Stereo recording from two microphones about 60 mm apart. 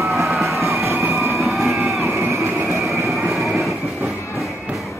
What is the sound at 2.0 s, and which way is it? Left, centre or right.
Music, right.